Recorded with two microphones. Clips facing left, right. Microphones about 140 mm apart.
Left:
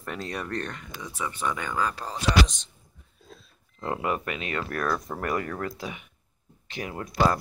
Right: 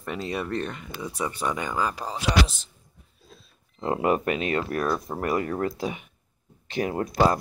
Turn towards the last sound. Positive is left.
turn(degrees=-40)  # may be behind; listen again after turning